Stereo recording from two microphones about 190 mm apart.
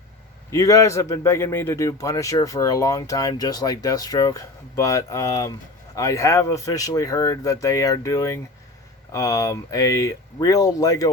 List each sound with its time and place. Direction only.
0.5 s a man's voice: 15° left (ahead or behind)